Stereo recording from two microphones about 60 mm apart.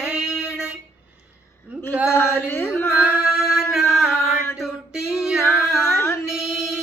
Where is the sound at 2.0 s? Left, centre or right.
Left.